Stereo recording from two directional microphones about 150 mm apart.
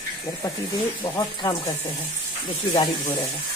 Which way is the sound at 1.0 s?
25° left (ahead or behind).